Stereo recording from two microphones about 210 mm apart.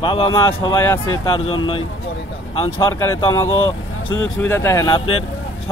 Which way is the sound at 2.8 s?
15° left (ahead or behind).